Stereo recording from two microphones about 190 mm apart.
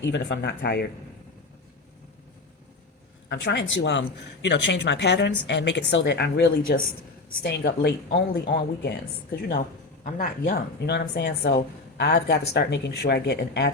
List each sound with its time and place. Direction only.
0.0 s speech: 70° left (ahead or behind)
3.2 s speech: 65° left (ahead or behind); by 10.5 s 45° left (ahead or behind)
10.8 s speech: 60° left (ahead or behind)